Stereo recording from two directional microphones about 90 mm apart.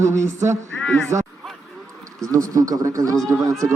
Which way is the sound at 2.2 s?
40° right (ahead or behind).